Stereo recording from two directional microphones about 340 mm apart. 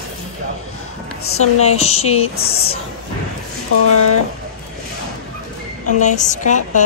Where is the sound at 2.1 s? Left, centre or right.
Left.